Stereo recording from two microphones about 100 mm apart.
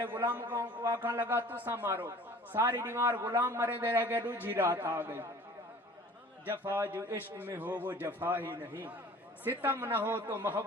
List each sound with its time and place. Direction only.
0.0 s a man's voice: 20° right (ahead or behind)
6.4 s a man's voice: 20° right (ahead or behind)